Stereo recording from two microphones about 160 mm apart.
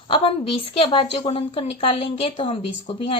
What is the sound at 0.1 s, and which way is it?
Speech, 35° left (ahead or behind).